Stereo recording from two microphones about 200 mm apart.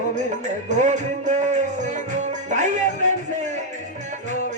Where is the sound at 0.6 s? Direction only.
35° right (ahead or behind).